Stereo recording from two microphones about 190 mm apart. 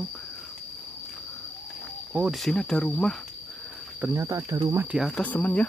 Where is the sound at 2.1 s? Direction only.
5° right (ahead or behind).